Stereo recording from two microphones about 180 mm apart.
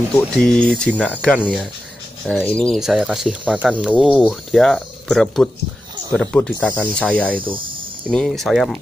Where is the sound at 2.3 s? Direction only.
5° left (ahead or behind).